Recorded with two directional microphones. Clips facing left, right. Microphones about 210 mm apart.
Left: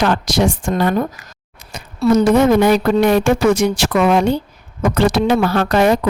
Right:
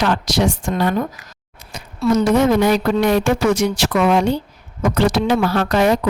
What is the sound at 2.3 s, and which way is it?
Speech, 55° left (ahead or behind).